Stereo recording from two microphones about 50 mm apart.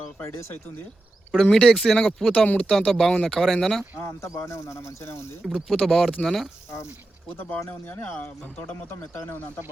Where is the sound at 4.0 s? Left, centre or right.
Left.